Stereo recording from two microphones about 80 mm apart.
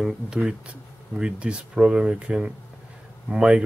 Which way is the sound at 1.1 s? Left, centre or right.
Centre.